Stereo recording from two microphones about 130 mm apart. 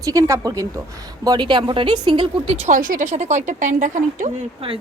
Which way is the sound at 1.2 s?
35° right (ahead or behind).